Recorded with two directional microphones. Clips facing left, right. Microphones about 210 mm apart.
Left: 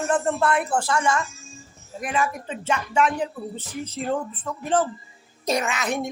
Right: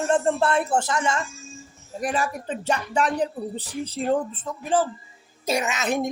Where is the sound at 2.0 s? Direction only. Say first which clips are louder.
Even; 35° right (ahead or behind).